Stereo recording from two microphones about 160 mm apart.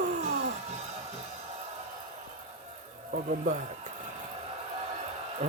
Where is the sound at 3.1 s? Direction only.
60° right (ahead or behind).